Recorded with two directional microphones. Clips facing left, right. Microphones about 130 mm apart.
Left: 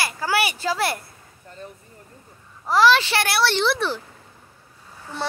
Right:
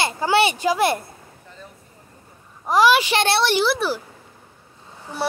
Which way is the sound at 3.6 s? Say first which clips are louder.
Right 1 dB; 5° right (ahead or behind).